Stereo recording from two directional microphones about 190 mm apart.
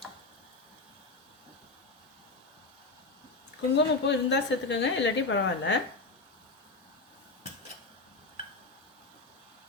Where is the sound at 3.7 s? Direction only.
70° left (ahead or behind).